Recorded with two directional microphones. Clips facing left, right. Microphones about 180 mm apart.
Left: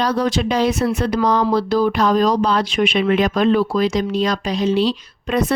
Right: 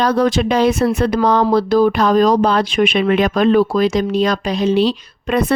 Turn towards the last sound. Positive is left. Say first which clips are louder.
# right 2 dB
turn(degrees=-60)  # may be behind; listen again after turning